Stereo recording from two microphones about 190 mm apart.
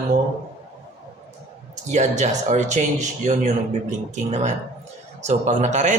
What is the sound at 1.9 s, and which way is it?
Speech, 40° right (ahead or behind).